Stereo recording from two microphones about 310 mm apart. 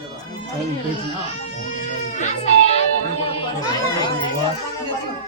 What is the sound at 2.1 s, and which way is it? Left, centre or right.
Music, left.